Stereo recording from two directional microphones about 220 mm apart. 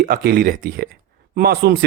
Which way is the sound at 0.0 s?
45° right (ahead or behind).